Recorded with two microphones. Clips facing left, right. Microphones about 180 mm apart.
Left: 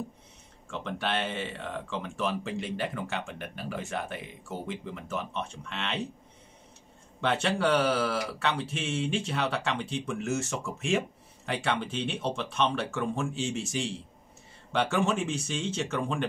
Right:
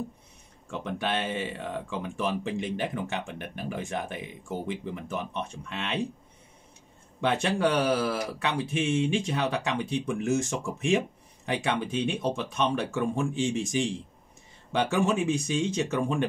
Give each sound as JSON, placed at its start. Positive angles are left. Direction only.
{"t": 0.7, "sound": "speech", "side_deg": -15}
{"t": 7.2, "sound": "speech", "side_deg": -15}